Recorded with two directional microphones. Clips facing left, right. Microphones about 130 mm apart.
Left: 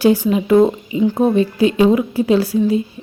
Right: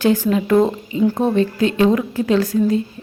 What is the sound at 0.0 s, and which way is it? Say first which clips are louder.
A woman's voice: left 2 dB; 15° left (ahead or behind).